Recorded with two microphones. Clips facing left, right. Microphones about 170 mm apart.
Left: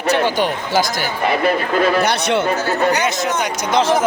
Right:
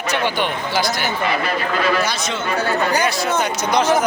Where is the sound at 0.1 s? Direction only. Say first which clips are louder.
Left 4 dB; 45° left (ahead or behind).